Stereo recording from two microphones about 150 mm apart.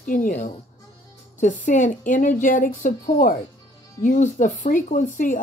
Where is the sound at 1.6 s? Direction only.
60° left (ahead or behind).